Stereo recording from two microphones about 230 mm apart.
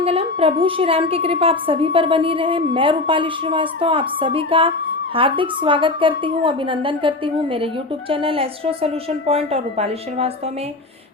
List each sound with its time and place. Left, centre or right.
0.0 s a woman's voice: right
8.1 s a woman's voice: right